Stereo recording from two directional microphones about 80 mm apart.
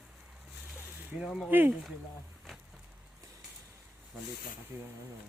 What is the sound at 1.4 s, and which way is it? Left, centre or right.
Speech, right.